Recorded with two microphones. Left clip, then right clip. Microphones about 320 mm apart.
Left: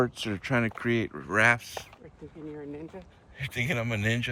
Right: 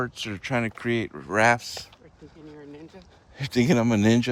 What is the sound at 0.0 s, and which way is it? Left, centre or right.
Speech, centre.